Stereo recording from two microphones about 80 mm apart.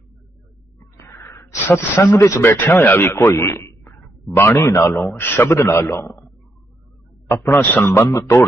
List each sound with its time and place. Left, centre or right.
0.9 s a sound: left
2.4 s a man's voice: left
7.3 s a man's voice: left
8.0 s a man's voice: left